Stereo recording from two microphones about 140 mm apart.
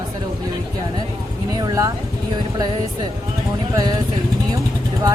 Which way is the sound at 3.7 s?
30° right (ahead or behind).